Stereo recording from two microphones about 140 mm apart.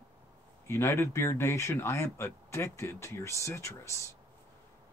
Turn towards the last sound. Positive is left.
turn(degrees=20)  # may be behind; listen again after turning